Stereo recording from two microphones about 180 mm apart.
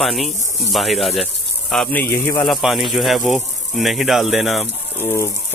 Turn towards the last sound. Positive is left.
turn(degrees=10)  # may be behind; listen again after turning